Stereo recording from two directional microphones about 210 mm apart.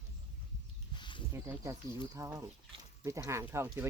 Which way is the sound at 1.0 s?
20° left (ahead or behind).